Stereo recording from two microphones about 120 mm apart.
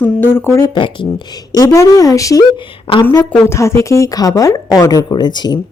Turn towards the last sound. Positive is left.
turn(degrees=35)  # may be behind; listen again after turning